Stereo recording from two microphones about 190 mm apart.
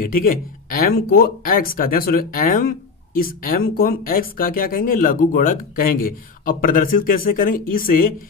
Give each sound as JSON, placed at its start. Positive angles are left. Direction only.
{"t": 0.0, "sound": "speech", "side_deg": 50}